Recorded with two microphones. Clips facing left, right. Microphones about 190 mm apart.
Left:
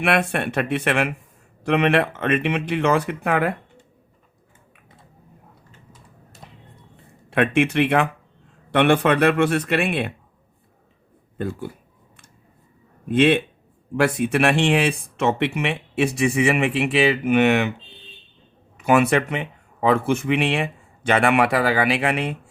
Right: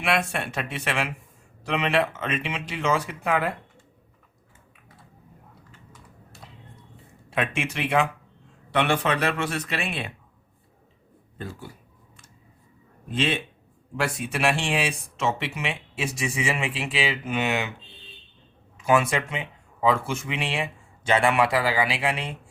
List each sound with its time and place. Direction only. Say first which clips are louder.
0.0 s speech: left 5 dB; 60° left (ahead or behind)
6.4 s music: left 3 dB; 55° left (ahead or behind)
6.9 s a sound: left 6 dB; 60° left (ahead or behind)
8.7 s speech: left 6 dB; 55° left (ahead or behind)
11.3 s speech: left 9 dB; 55° left (ahead or behind)
13.1 s speech: left 10 dB; 60° left (ahead or behind)
18.8 s speech: left 5 dB; 65° left (ahead or behind)